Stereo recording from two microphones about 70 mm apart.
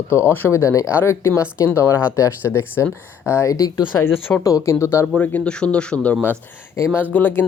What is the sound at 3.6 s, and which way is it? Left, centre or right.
Speech, left.